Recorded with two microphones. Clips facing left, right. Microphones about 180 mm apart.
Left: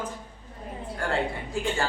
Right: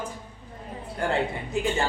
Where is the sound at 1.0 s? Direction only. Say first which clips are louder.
Right 2 dB; 20° right (ahead or behind).